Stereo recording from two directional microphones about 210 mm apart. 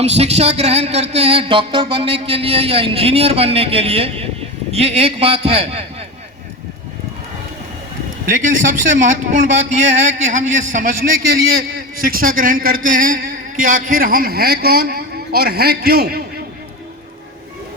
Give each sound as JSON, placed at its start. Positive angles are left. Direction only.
{"t": 0.0, "sound": "music", "side_deg": -30}
{"t": 8.4, "sound": "a man's voice", "side_deg": -35}